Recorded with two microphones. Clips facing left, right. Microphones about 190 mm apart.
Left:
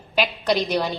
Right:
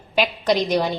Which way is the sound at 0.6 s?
Centre (ahead or behind).